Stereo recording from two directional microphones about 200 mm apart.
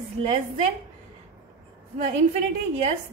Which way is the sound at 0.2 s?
40° right (ahead or behind).